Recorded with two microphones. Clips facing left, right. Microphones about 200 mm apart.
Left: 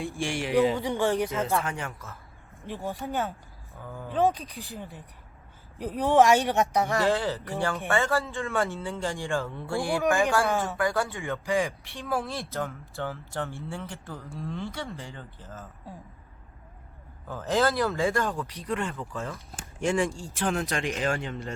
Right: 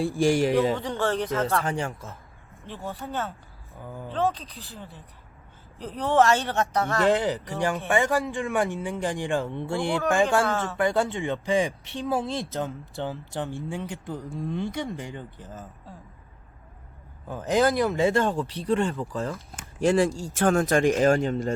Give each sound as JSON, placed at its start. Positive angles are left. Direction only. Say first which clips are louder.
{"t": 0.0, "sound": "speech", "louder": "right 9 dB", "side_deg": -40}
{"t": 0.8, "sound": "speech", "louder": "left 1 dB", "side_deg": 15}
{"t": 1.6, "sound": "speech", "louder": "right 5 dB", "side_deg": -30}
{"t": 2.6, "sound": "speech", "louder": "left 2 dB", "side_deg": 15}
{"t": 3.8, "sound": "speech", "louder": "right 1 dB", "side_deg": -15}
{"t": 4.1, "sound": "speech", "louder": "left 2 dB", "side_deg": 15}
{"t": 7.0, "sound": "speech", "louder": "right 3 dB", "side_deg": -20}
{"t": 10.4, "sound": "speech", "louder": "even", "side_deg": 15}
{"t": 10.8, "sound": "speech", "louder": "right 4 dB", "side_deg": -20}
{"t": 17.2, "sound": "speech", "louder": "right 3 dB", "side_deg": -15}